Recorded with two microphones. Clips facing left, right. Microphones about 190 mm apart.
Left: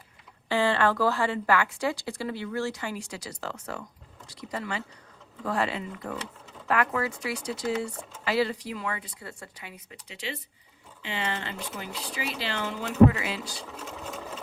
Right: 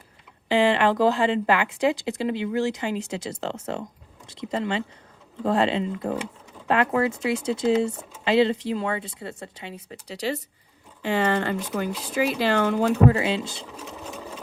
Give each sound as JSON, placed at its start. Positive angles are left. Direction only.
{"t": 0.4, "sound": "speech", "side_deg": -15}
{"t": 6.1, "sound": "sewing machine", "side_deg": -10}
{"t": 6.7, "sound": "speech", "side_deg": -25}
{"t": 13.1, "sound": "speech", "side_deg": -30}
{"t": 13.7, "sound": "sewing machine", "side_deg": -10}